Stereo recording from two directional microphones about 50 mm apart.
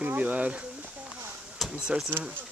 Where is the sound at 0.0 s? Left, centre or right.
Right.